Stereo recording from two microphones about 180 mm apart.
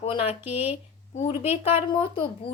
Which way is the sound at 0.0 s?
35° left (ahead or behind).